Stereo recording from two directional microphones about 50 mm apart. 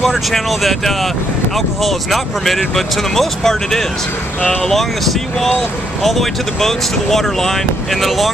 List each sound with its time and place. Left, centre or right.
0.0 s speech: centre
4.4 s speech: left
4.6 s speech: centre